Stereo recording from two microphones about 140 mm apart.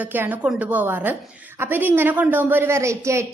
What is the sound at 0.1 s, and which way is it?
A woman's voice, 15° right (ahead or behind).